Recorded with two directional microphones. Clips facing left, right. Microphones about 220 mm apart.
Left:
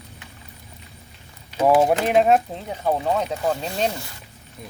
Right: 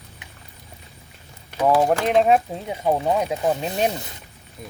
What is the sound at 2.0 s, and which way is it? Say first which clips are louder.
Speech: even; centre (ahead or behind).